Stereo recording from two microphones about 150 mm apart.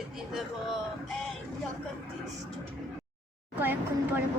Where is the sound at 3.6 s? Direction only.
10° right (ahead or behind).